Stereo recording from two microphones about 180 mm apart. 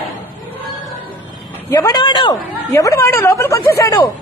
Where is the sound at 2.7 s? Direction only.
15° left (ahead or behind).